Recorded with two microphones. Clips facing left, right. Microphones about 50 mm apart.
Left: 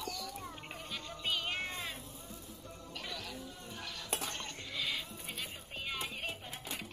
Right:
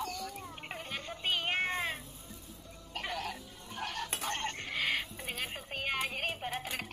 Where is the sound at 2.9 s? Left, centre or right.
Right.